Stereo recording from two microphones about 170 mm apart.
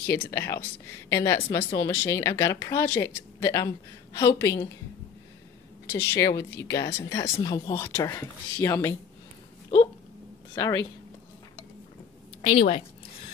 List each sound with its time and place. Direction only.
0.0 s a woman's voice: 15° left (ahead or behind)
5.9 s a woman's voice: 15° left (ahead or behind)
7.7 s a woman's voice: 15° left (ahead or behind)
10.5 s speech: 20° left (ahead or behind)
12.4 s a woman's voice: 35° left (ahead or behind)